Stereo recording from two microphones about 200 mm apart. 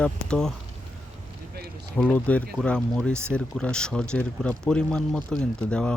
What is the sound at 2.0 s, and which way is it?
A man's voice, 5° left (ahead or behind).